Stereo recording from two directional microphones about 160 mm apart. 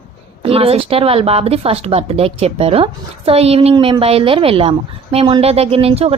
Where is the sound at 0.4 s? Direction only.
35° right (ahead or behind).